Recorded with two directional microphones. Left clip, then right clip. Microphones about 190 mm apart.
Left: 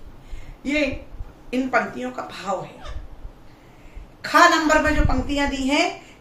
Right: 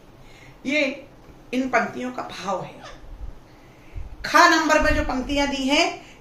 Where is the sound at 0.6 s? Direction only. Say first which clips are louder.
Even; 10° right (ahead or behind).